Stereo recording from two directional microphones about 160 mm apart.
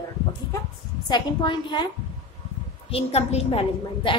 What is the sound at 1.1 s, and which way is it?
Speech, 30° left (ahead or behind).